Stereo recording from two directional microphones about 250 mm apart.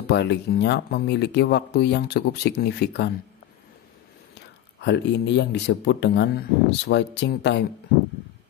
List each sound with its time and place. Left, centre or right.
0.1 s speech: left
4.8 s speech: left